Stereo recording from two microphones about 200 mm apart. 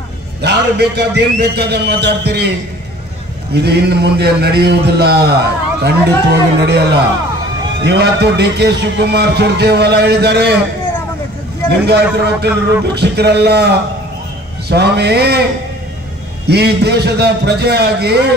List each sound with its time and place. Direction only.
0.4 s a man's voice: 55° right (ahead or behind)
3.5 s a man's voice: 55° right (ahead or behind)
11.8 s a man's voice: 55° right (ahead or behind)
16.4 s a man's voice: 55° right (ahead or behind)